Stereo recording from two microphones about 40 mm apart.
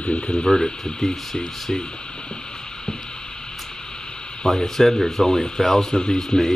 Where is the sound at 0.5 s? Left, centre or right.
Centre.